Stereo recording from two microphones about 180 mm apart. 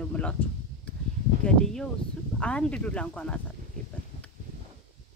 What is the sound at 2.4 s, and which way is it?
Speech, 5° left (ahead or behind).